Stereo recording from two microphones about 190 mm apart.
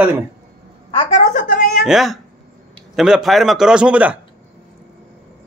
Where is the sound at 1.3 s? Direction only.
50° left (ahead or behind).